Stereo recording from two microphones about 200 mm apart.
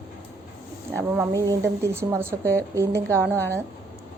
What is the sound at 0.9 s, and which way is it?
Speech, 10° right (ahead or behind).